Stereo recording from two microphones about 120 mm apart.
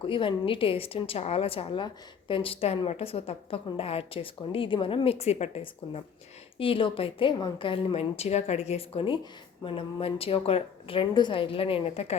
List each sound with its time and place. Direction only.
0.0 s a woman's voice: 45° left (ahead or behind); by 6.0 s 60° left (ahead or behind)
6.6 s a woman's voice: 45° left (ahead or behind)
7.9 s a woman's voice: 60° left (ahead or behind)